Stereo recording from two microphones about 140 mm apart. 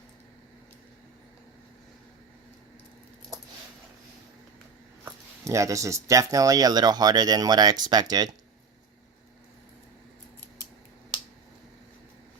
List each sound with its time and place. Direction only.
5.0 s speech: 20° right (ahead or behind)